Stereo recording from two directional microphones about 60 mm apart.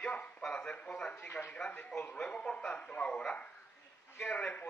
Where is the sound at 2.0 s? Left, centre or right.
Left.